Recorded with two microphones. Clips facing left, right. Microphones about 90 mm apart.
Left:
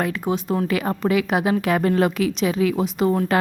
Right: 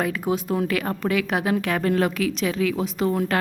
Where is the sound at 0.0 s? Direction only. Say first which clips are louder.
Left 1 dB; centre (ahead or behind).